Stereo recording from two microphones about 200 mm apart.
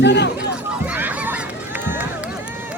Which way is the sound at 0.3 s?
5° right (ahead or behind).